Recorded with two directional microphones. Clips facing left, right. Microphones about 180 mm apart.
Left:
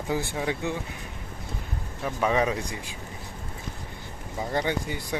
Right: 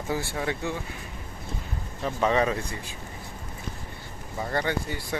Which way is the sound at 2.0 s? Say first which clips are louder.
Right 1 dB; 10° left (ahead or behind).